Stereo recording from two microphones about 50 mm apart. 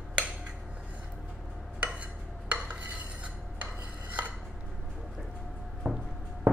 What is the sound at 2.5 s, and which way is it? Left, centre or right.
Cutlery, right.